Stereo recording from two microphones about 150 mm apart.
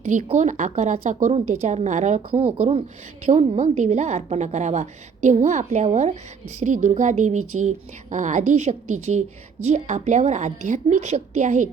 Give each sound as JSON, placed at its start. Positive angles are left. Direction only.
{"t": 0.0, "sound": "a woman's voice", "side_deg": -55}